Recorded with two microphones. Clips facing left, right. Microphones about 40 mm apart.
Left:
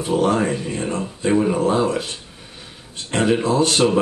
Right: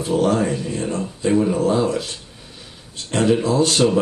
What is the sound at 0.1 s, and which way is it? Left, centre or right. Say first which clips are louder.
Speech: even; centre.